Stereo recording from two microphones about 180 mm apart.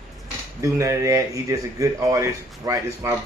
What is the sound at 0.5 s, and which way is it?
Speech, 15° right (ahead or behind).